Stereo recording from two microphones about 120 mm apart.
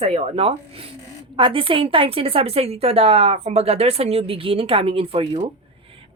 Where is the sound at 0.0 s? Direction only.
60° right (ahead or behind).